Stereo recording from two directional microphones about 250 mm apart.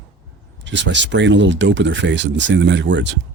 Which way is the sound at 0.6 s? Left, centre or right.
Right.